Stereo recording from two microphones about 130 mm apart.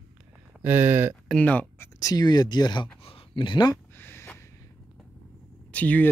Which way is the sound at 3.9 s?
15° left (ahead or behind).